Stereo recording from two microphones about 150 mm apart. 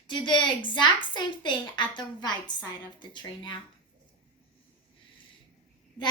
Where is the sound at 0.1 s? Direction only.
30° left (ahead or behind).